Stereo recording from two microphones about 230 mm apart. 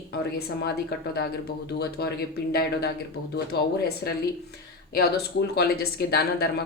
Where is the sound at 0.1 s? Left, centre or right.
Left.